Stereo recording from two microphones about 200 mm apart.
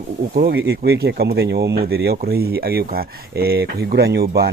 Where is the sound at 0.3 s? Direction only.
55° right (ahead or behind).